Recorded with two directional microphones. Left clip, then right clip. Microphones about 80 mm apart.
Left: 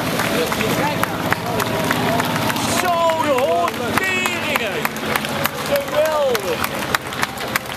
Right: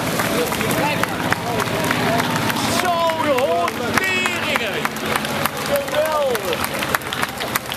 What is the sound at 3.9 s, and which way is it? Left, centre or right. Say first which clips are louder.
Run: right 2 dB; left.